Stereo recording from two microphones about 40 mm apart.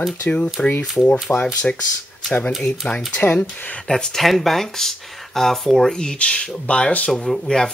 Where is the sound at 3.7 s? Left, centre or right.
Centre.